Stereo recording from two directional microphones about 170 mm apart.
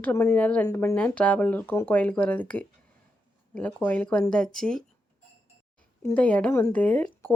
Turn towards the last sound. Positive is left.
turn(degrees=10)  # may be behind; listen again after turning